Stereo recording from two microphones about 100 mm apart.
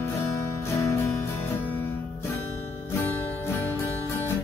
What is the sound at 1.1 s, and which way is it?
Music, 20° left (ahead or behind).